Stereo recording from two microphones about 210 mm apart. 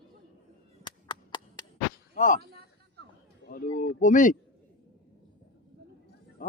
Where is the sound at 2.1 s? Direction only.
40° left (ahead or behind).